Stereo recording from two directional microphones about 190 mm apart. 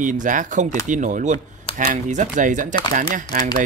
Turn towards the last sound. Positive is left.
turn(degrees=-50)  # may be behind; listen again after turning